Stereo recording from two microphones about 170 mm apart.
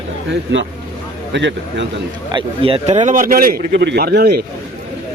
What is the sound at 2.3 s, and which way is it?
A man's voice, 35° right (ahead or behind).